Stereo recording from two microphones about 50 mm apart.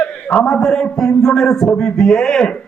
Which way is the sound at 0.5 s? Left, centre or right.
Centre.